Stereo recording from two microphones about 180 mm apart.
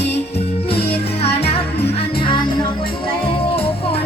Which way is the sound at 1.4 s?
35° left (ahead or behind).